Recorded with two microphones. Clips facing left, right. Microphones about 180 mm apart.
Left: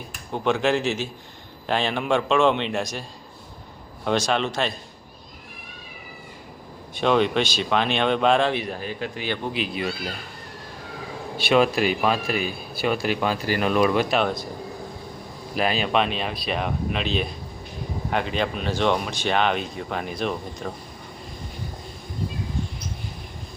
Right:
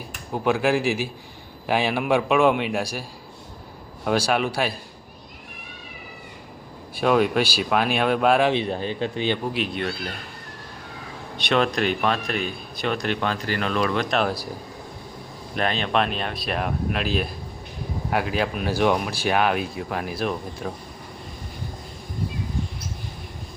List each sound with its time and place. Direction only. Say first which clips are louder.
0.3 s a man's voice: right 1 dB; 10° right (ahead or behind)
4.0 s a man's voice: right 1 dB; 5° right (ahead or behind)
6.9 s speech: right 1 dB; 5° right (ahead or behind)
8.5 s speech: right 4 dB; 25° right (ahead or behind)
9.4 s speech: right 1 dB; centre (ahead or behind)
11.3 s speech: left 2 dB; 5° left (ahead or behind)
15.5 s speech: left 1 dB; 5° left (ahead or behind)